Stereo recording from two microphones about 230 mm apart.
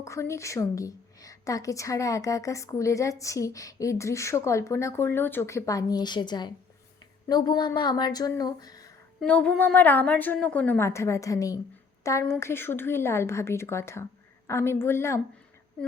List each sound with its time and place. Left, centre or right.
0.0 s a woman's voice: centre
9.2 s a woman's voice: centre